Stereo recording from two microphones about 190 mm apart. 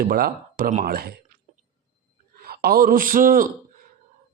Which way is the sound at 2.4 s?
55° right (ahead or behind).